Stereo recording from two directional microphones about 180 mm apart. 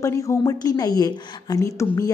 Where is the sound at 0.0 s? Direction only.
15° left (ahead or behind).